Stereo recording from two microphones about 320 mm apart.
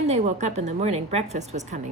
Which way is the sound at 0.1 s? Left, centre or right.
Right.